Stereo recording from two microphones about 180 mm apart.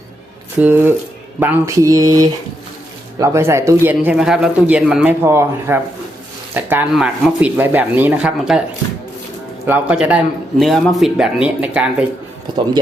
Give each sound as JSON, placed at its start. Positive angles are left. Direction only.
{"t": 0.6, "sound": "speech", "side_deg": -10}
{"t": 9.6, "sound": "speech", "side_deg": -10}